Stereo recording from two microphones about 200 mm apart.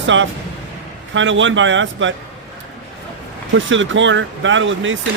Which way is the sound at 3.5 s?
70° right (ahead or behind).